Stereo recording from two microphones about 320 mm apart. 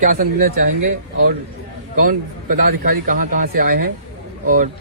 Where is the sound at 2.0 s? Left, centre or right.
Right.